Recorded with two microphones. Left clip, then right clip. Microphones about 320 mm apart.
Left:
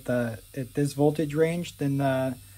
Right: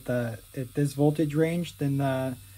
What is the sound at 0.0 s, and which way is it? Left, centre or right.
Speech, centre.